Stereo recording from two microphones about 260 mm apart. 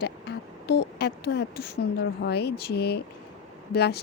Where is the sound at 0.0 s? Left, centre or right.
Left.